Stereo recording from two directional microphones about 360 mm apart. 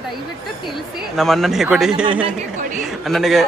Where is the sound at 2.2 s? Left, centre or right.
Right.